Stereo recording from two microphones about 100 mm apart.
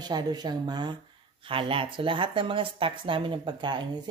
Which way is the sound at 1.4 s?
60° right (ahead or behind).